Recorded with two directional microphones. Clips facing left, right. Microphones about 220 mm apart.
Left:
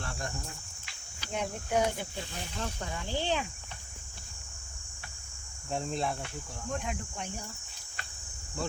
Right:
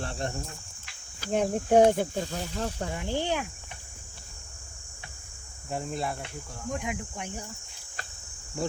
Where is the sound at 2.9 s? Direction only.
20° right (ahead or behind).